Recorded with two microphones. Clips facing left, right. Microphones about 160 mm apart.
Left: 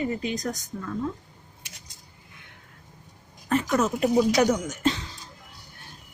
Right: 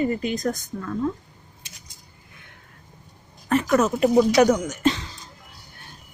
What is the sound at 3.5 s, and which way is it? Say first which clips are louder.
A woman's voice: right 4 dB; 70° right (ahead or behind).